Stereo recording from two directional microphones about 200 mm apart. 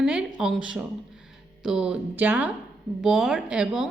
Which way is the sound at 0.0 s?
5° right (ahead or behind).